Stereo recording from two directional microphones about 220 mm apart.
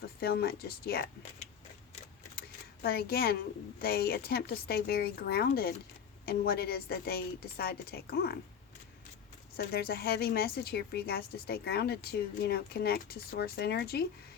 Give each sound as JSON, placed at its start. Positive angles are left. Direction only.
{"t": 0.2, "sound": "a woman's voice", "side_deg": 45}
{"t": 2.8, "sound": "a woman's voice", "side_deg": 45}
{"t": 9.6, "sound": "a woman's voice", "side_deg": 45}